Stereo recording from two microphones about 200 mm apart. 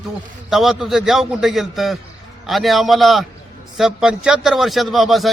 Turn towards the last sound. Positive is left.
turn(degrees=0)  # may be behind; listen again after turning